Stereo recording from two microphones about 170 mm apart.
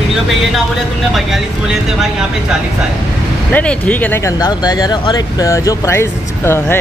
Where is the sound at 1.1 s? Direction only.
Centre (ahead or behind).